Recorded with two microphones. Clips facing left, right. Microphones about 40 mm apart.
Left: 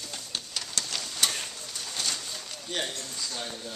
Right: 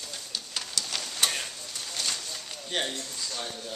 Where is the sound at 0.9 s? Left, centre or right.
Centre.